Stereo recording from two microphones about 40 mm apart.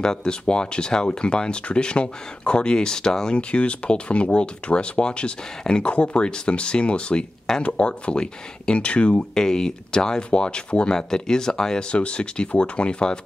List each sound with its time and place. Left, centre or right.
0.0 s speech: centre
3.3 s speech: left
9.3 s speech: centre
11.9 s speech: left